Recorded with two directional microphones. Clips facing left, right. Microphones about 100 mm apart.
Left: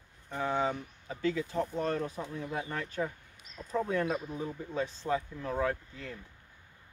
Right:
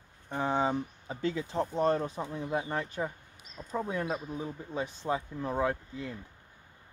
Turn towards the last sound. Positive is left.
turn(degrees=-20)  # may be behind; listen again after turning